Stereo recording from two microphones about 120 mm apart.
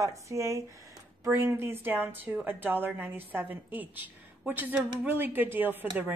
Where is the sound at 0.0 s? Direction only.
25° right (ahead or behind).